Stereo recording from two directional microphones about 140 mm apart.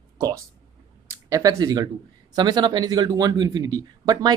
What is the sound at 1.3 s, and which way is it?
Speech, 25° right (ahead or behind).